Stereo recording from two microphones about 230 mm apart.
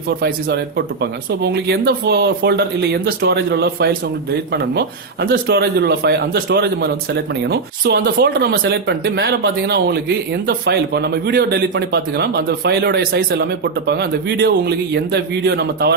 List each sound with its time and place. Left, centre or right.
0.2 s a man's voice: right